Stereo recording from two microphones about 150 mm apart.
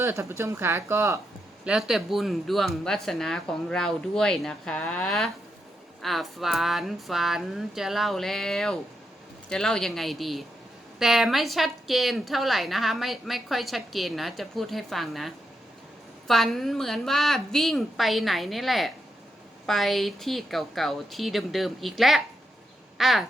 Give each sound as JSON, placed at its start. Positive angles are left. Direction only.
{"t": 0.0, "sound": "speech", "side_deg": -20}
{"t": 1.6, "sound": "a woman's voice", "side_deg": -5}
{"t": 23.0, "sound": "crow", "side_deg": 0}